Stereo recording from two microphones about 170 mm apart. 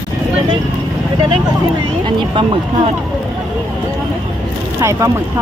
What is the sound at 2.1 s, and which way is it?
Speech, 30° right (ahead or behind).